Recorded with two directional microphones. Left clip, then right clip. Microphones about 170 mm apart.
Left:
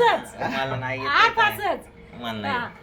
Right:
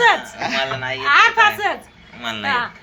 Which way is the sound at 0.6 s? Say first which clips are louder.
Right 5 dB; 10° left (ahead or behind).